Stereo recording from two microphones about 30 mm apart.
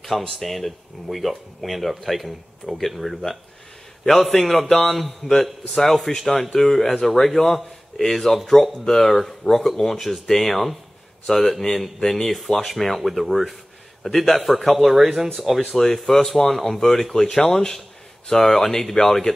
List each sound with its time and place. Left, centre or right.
0.3 s speech: centre
4.4 s speech: centre
9.9 s speech: centre
10.2 s speech: centre
12.6 s speech: centre
15.7 s speech: centre